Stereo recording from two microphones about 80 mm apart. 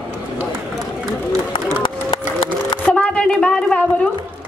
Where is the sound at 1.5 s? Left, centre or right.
Left.